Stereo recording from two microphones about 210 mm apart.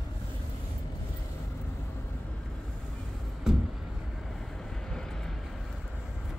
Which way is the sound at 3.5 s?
Centre (ahead or behind).